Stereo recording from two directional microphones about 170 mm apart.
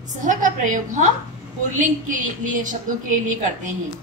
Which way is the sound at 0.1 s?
50° right (ahead or behind).